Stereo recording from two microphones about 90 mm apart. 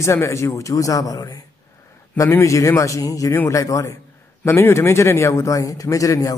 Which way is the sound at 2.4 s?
35° left (ahead or behind).